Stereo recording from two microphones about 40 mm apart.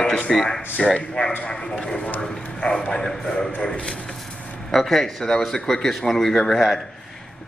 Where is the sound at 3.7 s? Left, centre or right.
Left.